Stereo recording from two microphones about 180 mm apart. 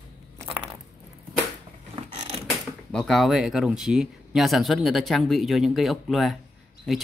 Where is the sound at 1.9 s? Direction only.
30° right (ahead or behind).